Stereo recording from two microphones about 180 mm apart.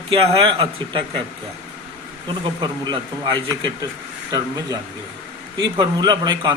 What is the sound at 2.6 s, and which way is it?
Speech, 25° right (ahead or behind).